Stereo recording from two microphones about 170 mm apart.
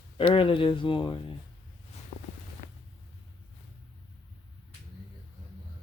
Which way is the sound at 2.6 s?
35° left (ahead or behind).